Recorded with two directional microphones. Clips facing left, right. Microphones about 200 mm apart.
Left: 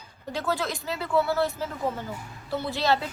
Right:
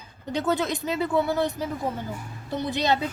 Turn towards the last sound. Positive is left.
turn(degrees=-20)  # may be behind; listen again after turning